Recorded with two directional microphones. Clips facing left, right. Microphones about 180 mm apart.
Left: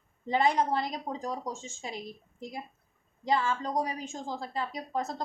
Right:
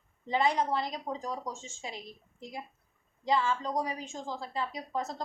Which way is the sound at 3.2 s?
45° left (ahead or behind).